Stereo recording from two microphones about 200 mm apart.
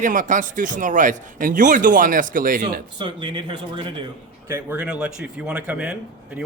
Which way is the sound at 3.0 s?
25° right (ahead or behind).